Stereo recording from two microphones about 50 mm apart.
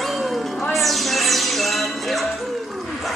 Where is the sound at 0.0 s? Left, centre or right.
Centre.